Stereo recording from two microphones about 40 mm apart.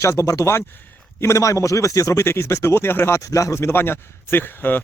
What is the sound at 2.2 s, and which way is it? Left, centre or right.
Speech, left.